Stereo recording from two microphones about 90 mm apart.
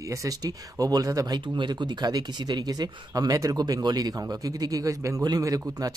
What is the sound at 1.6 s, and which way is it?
Speech, 55° right (ahead or behind).